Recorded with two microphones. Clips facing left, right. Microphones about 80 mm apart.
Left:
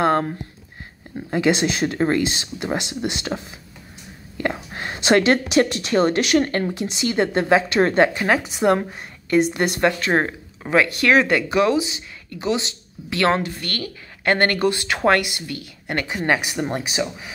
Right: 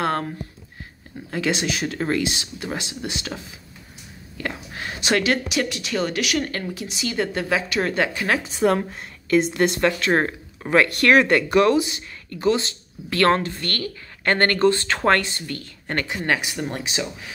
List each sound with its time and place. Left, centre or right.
0.0 s a sound: left
1.3 s speech: left
1.6 s speech: left
4.4 s speech: left; by 17.3 s centre